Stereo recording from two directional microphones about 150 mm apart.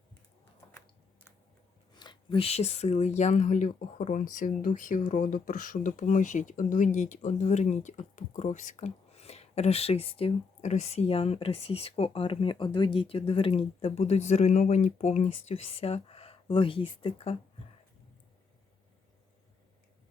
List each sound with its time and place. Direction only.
1.9 s speech: 30° left (ahead or behind)